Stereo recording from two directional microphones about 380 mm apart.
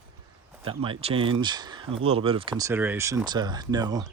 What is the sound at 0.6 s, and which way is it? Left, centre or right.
Speech, centre.